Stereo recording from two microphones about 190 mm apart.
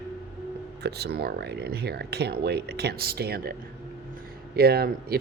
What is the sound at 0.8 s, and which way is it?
Speech, 60° right (ahead or behind).